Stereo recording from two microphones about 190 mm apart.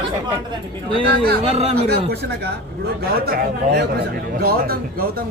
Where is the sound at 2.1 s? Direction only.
60° right (ahead or behind).